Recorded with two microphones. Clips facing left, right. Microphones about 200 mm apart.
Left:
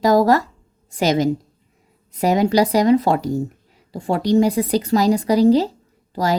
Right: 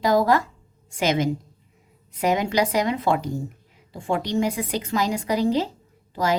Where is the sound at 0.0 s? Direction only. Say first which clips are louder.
Left 5 dB; 40° left (ahead or behind).